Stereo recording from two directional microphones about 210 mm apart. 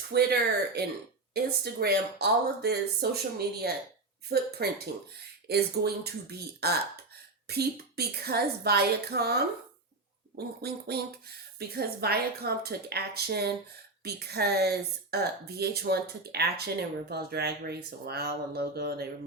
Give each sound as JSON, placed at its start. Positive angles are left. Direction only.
{"t": 0.1, "sound": "speech", "side_deg": -50}